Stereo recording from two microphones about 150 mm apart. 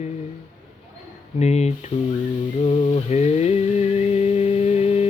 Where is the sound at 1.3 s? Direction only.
45° left (ahead or behind).